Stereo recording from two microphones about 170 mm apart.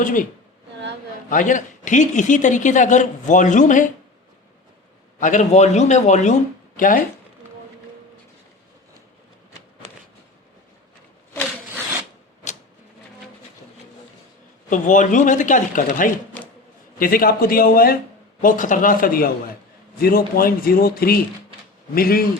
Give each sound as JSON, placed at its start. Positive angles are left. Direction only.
{"t": 0.0, "sound": "a man's voice", "side_deg": 50}
{"t": 1.3, "sound": "a man's voice", "side_deg": 50}
{"t": 5.2, "sound": "a man's voice", "side_deg": 45}
{"t": 14.7, "sound": "a man's voice", "side_deg": 50}